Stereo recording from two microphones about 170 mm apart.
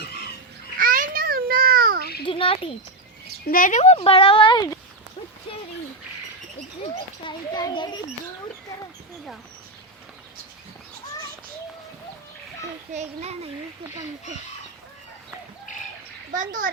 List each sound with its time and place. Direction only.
0.8 s a sound: 55° right (ahead or behind)
2.2 s a sound: 30° left (ahead or behind)
3.4 s speech: 55° left (ahead or behind); by 4.8 s 25° left (ahead or behind)
7.3 s a child's voice: 25° left (ahead or behind)
12.9 s a child's voice: 40° right (ahead or behind)
16.3 s a child's voice: 50° right (ahead or behind)